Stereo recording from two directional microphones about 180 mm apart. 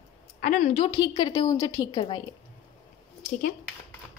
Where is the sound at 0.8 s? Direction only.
25° left (ahead or behind).